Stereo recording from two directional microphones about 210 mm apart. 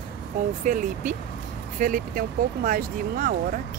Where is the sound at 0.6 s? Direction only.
35° right (ahead or behind).